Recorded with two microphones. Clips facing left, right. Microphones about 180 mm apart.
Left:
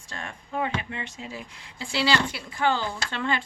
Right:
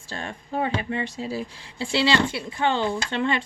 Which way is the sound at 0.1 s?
30° right (ahead or behind).